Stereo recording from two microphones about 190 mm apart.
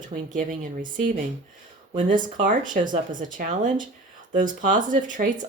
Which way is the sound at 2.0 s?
45° right (ahead or behind).